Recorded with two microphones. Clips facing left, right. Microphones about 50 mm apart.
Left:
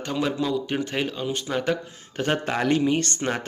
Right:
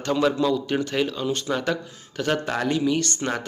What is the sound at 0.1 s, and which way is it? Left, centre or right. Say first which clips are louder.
Speech: right 4 dB; centre.